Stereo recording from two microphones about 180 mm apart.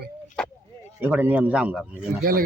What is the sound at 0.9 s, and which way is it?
A man's voice, 10° right (ahead or behind).